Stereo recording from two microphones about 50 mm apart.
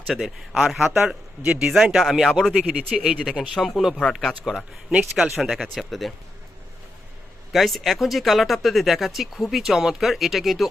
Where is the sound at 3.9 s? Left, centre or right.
Centre.